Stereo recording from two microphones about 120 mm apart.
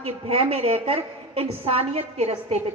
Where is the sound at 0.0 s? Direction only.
50° right (ahead or behind).